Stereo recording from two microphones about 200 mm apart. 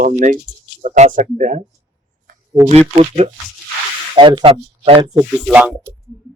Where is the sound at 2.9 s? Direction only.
30° right (ahead or behind).